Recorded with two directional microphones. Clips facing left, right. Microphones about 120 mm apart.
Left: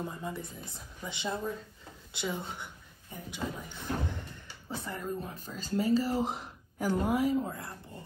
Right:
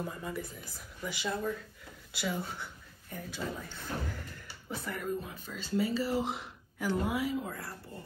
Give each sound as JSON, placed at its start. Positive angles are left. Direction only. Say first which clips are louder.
{"t": 0.2, "sound": "speech", "louder": "even", "side_deg": 25}
{"t": 4.6, "sound": "speech", "louder": "right 1 dB", "side_deg": 30}
{"t": 5.3, "sound": "speech", "louder": "even", "side_deg": 40}
{"t": 7.4, "sound": "speech", "louder": "left 2 dB", "side_deg": 25}